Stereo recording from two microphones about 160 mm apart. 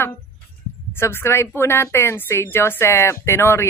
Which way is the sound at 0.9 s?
15° left (ahead or behind).